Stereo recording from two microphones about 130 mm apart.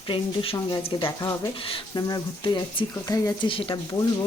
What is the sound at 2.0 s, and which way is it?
Speech, 30° left (ahead or behind).